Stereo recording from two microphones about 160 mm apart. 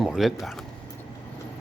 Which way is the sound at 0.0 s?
Centre (ahead or behind).